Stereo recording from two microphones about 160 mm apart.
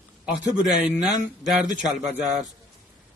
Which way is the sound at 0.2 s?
5° right (ahead or behind).